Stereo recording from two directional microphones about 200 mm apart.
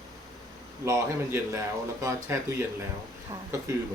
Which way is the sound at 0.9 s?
15° right (ahead or behind).